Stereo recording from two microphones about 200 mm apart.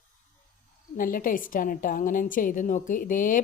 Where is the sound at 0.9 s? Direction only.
45° left (ahead or behind).